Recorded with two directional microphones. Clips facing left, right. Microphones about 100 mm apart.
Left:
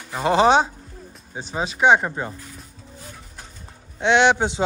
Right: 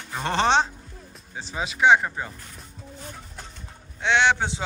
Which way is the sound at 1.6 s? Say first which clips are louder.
Left 2 dB; 25° left (ahead or behind).